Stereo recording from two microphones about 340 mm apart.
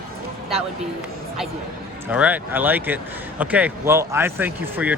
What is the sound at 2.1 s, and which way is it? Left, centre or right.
Speech, centre.